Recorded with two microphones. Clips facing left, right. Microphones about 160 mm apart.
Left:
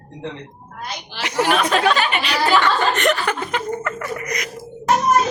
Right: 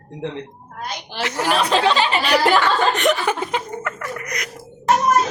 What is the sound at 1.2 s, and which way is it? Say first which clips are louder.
Speech: left 3 dB; 15° left (ahead or behind).